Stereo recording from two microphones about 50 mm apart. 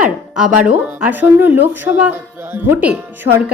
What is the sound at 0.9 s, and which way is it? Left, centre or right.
Speech, right.